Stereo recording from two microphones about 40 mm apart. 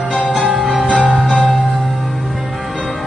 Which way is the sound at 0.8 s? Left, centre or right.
Right.